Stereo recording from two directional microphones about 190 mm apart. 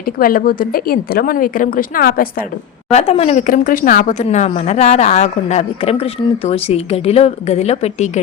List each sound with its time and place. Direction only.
0.2 s a woman's voice: 50° left (ahead or behind)
2.9 s a woman's voice: 35° left (ahead or behind)